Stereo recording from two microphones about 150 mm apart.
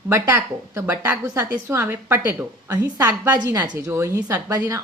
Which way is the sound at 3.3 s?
25° right (ahead or behind).